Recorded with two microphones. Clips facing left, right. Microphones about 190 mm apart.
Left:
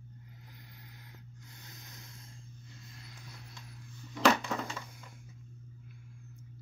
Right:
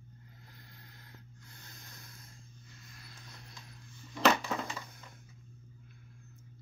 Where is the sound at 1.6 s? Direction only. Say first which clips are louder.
Left 1 dB; 15° left (ahead or behind).